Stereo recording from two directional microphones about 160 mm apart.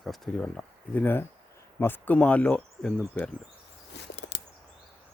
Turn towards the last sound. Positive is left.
turn(degrees=90)